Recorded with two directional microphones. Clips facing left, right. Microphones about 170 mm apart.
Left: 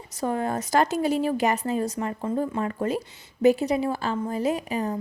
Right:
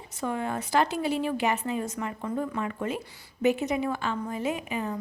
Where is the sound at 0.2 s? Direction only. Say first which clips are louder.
Left 4 dB; 40° left (ahead or behind).